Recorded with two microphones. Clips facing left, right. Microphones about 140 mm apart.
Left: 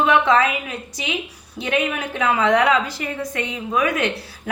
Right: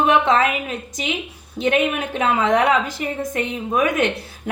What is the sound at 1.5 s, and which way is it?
A woman's voice, 20° right (ahead or behind).